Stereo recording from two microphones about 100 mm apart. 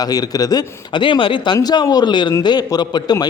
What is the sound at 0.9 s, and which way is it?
Speech, 55° left (ahead or behind).